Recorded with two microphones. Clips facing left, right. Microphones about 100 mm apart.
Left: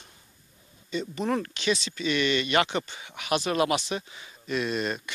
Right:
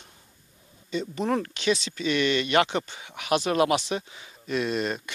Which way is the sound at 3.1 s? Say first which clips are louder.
Right 2 dB; 55° right (ahead or behind).